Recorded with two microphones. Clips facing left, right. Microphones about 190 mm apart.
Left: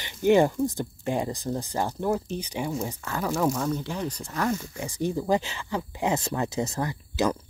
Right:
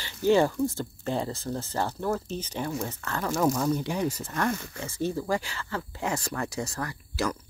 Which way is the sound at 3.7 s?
15° right (ahead or behind).